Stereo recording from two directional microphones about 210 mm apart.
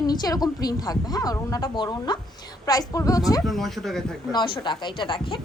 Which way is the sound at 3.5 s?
Centre (ahead or behind).